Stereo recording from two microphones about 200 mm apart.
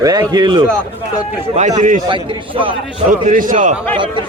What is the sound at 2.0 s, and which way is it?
Speech, 25° right (ahead or behind).